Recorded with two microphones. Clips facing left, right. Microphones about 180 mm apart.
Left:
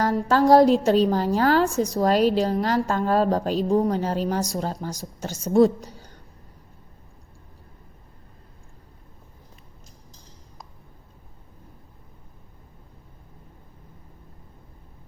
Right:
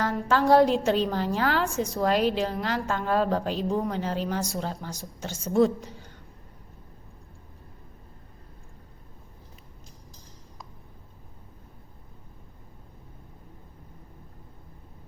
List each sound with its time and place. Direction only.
0.0 s a woman's voice: 40° left (ahead or behind)